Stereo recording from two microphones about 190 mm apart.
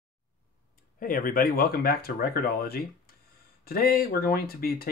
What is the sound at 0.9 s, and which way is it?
Speech, 50° left (ahead or behind).